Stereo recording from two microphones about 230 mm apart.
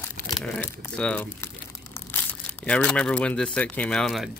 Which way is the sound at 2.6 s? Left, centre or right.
Centre.